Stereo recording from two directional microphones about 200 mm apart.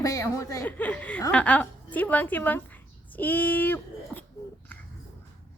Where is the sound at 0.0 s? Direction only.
15° left (ahead or behind).